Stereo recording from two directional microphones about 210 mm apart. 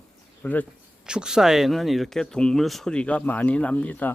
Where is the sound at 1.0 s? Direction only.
5° right (ahead or behind).